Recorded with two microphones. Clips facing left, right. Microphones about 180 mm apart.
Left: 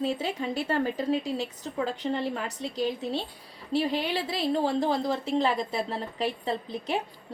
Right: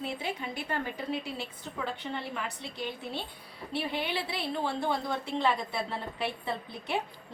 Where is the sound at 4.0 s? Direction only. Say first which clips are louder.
Left 5 dB; 40° left (ahead or behind).